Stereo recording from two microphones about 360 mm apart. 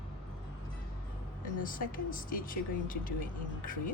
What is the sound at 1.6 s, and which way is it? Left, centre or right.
Speech, left.